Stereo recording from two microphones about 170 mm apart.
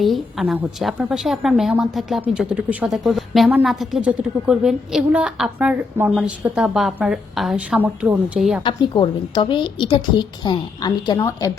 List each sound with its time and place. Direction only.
0.0 s a woman's voice: centre (ahead or behind)
8.6 s a woman's voice: 30° left (ahead or behind)